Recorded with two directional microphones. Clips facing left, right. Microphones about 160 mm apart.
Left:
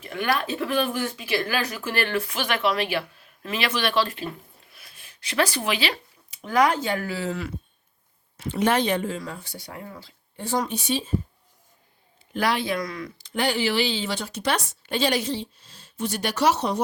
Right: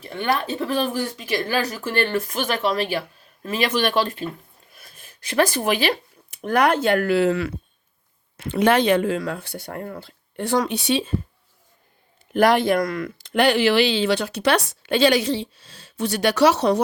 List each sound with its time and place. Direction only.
0.0 s speech: 30° right (ahead or behind); by 11.1 s 85° right
12.3 s speech: 55° right (ahead or behind); by 16.8 s 80° right